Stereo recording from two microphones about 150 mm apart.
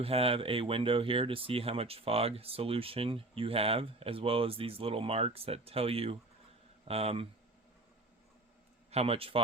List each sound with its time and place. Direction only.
0.0 s speech: 40° right (ahead or behind)
8.9 s speech: 40° right (ahead or behind)